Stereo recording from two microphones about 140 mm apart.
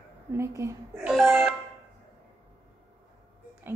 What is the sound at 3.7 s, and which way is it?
Whispering, 15° right (ahead or behind).